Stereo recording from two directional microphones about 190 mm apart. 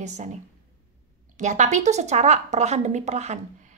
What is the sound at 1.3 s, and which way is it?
Speech, 40° right (ahead or behind).